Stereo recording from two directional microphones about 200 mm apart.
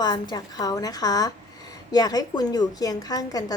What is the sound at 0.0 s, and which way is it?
A woman's voice, 20° left (ahead or behind).